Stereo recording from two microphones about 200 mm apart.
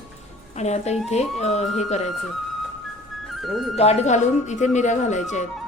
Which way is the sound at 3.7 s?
35° left (ahead or behind).